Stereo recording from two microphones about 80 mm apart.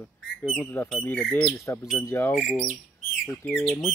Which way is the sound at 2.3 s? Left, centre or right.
Centre.